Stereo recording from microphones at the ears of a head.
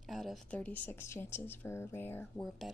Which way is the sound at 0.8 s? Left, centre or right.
Left.